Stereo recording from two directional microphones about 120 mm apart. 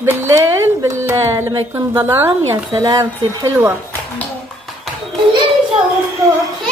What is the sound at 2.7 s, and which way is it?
Speech, 30° right (ahead or behind).